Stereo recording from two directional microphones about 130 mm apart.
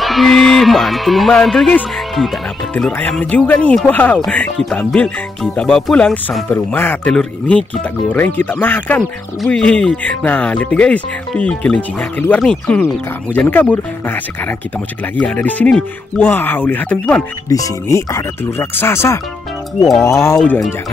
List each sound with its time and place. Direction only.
0.0 s speech: centre (ahead or behind)
3.0 s speech: 10° left (ahead or behind)
17.5 s speech: 25° left (ahead or behind)